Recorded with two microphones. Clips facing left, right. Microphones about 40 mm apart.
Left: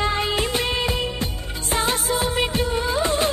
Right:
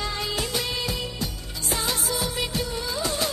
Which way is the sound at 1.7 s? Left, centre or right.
Left.